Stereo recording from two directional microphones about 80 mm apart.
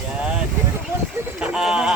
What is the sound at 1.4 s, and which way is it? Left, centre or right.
Speech, centre.